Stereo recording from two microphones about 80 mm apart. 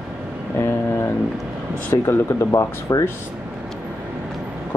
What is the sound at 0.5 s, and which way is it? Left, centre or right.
Speech, left.